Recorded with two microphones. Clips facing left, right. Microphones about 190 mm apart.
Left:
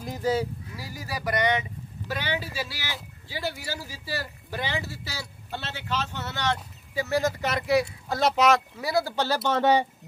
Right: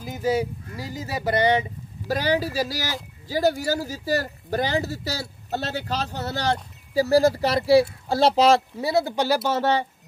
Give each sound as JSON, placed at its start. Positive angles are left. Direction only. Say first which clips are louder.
{"t": 0.0, "sound": "speech", "louder": "right 2 dB", "side_deg": -5}
{"t": 0.7, "sound": "speech", "louder": "right 6 dB", "side_deg": -20}